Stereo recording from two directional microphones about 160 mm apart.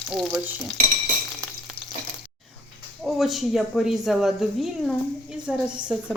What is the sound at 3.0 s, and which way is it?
A woman's voice, centre (ahead or behind).